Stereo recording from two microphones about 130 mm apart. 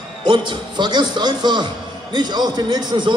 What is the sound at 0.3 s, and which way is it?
A man's voice, 35° right (ahead or behind).